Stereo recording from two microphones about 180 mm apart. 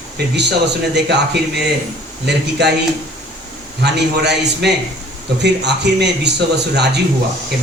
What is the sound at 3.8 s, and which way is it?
Speech, 70° right (ahead or behind).